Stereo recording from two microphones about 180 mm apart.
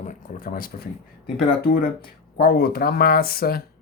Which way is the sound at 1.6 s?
55° left (ahead or behind).